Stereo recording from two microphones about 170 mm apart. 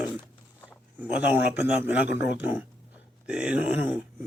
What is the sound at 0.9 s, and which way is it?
Speech, 10° right (ahead or behind).